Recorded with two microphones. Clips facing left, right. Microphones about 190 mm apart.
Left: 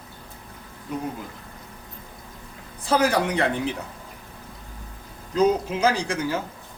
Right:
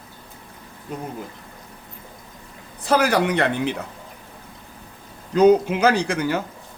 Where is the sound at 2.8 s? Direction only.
65° right (ahead or behind).